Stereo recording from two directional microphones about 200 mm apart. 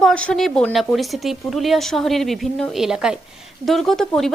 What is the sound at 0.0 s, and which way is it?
A woman's voice, 5° left (ahead or behind).